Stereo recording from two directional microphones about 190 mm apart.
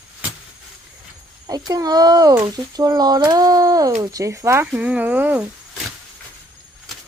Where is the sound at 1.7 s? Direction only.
20° right (ahead or behind).